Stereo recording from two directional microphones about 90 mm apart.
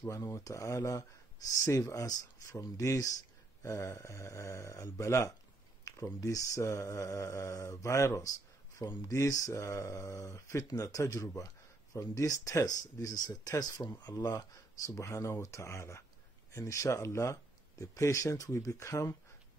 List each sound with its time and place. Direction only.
0.1 s speech: 35° left (ahead or behind)
5.9 s a sound: 40° left (ahead or behind)
6.2 s speech: 35° left (ahead or behind)